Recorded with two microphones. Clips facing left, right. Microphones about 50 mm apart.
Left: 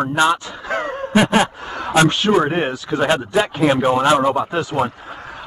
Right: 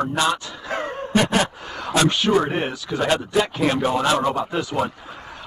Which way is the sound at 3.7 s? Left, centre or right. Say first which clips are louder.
Left 5 dB; left.